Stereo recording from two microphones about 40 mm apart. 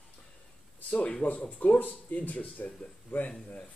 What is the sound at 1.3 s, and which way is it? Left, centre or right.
Speech, left.